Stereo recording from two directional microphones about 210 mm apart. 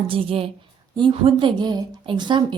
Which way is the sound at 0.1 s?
25° right (ahead or behind).